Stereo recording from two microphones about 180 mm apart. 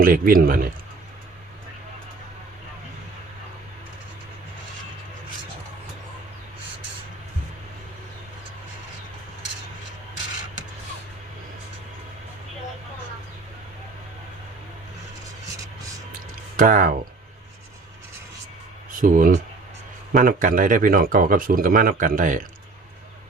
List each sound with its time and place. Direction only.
0.0 s speech: 50° right (ahead or behind)
16.6 s speech: 50° right (ahead or behind)
18.9 s speech: 50° right (ahead or behind)